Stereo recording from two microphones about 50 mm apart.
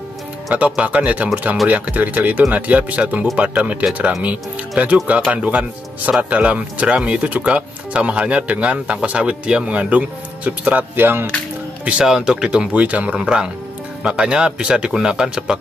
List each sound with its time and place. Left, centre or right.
0.6 s speech: right
11.0 s speech: right
11.8 s speech: right